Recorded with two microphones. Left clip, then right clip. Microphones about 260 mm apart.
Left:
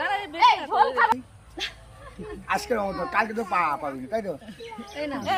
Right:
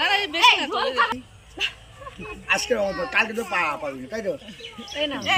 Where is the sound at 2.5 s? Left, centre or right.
Centre.